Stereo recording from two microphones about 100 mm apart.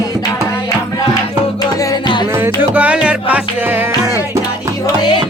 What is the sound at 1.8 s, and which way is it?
Music, 35° left (ahead or behind).